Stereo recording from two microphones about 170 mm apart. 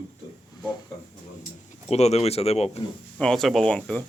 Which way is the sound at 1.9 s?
40° left (ahead or behind).